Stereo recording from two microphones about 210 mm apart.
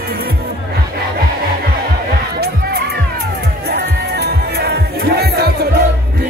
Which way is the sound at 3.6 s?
50° right (ahead or behind).